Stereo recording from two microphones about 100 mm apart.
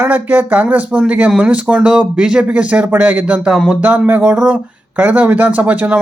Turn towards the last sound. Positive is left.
turn(degrees=-15)  # may be behind; listen again after turning